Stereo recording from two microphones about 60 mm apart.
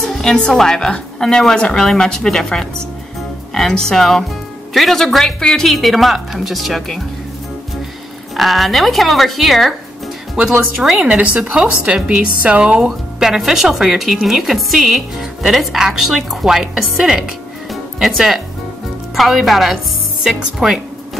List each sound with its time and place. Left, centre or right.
0.0 s a woman's voice: centre
8.4 s speech: centre
10.4 s a woman's voice: centre
12.8 s speech: centre